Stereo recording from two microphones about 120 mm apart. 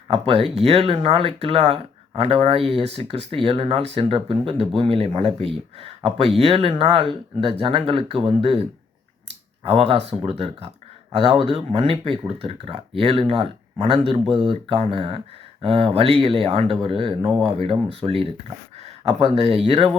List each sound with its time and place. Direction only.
0.1 s speech: 55° right (ahead or behind)
9.6 s speech: 55° right (ahead or behind)
18.8 s speech: 65° right (ahead or behind)